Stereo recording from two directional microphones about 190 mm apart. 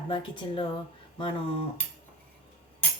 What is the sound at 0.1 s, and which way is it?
Speech, 25° left (ahead or behind).